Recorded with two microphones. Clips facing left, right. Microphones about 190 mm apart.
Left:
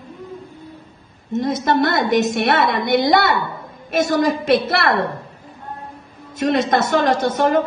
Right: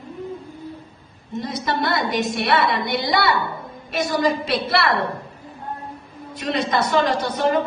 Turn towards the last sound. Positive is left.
turn(degrees=50)  # may be behind; listen again after turning